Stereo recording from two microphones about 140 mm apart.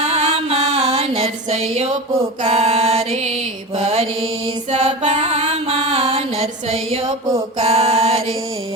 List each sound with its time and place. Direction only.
0.1 s music: 45° right (ahead or behind)
2.4 s mantra: 45° right (ahead or behind)